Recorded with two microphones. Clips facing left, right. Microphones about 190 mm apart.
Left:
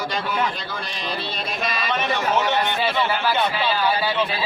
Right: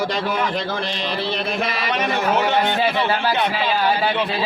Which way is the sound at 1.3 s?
65° right (ahead or behind).